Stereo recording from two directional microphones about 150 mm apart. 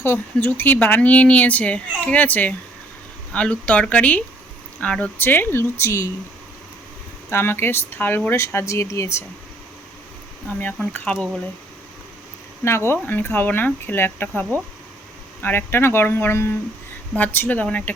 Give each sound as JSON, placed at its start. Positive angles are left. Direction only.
{"t": 0.0, "sound": "speech", "side_deg": 15}
{"t": 7.3, "sound": "speech", "side_deg": 15}
{"t": 10.9, "sound": "speech", "side_deg": 10}
{"t": 12.6, "sound": "speech", "side_deg": 15}